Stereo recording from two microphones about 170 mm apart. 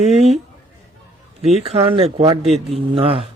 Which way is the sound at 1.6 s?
35° right (ahead or behind).